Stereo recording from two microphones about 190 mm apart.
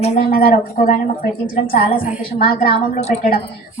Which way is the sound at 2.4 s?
50° left (ahead or behind).